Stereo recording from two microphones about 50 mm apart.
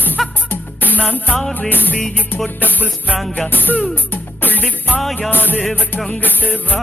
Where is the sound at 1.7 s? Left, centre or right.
Left.